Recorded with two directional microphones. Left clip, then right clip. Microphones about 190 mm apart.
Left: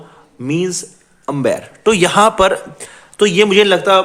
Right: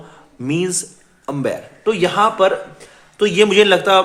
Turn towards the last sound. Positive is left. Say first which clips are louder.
# left 1 dB
turn(degrees=15)  # may be behind; listen again after turning